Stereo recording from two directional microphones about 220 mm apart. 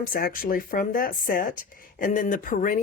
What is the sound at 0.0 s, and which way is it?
Speech, 40° left (ahead or behind).